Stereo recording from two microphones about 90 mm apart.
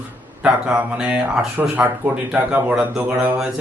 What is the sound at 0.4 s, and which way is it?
Speech, 10° right (ahead or behind).